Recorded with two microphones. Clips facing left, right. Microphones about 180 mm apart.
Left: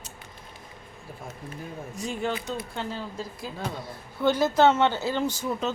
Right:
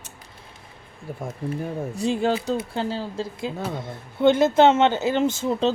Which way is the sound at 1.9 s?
30° right (ahead or behind).